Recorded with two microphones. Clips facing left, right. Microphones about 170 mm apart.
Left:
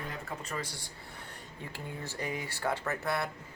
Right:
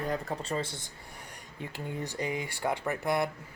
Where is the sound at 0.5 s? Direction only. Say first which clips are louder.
Right 5 dB; 25° right (ahead or behind).